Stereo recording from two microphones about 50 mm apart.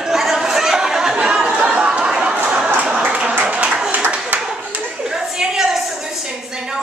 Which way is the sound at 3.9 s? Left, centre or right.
Right.